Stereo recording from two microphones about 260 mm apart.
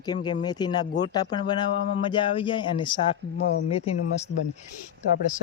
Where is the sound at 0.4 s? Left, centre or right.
Centre.